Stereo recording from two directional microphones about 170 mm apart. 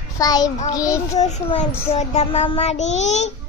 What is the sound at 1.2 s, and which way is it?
Speech, 45° left (ahead or behind).